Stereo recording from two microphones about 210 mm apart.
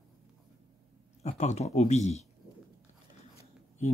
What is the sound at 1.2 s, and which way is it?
Speech, 30° left (ahead or behind).